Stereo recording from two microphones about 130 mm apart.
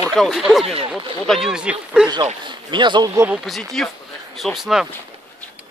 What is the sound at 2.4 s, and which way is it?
Speech, 35° right (ahead or behind).